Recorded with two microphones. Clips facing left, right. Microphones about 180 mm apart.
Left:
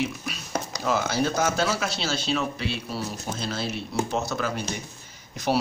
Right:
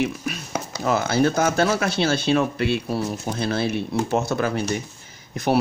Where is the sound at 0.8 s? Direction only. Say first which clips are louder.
Right 5 dB; 55° right (ahead or behind).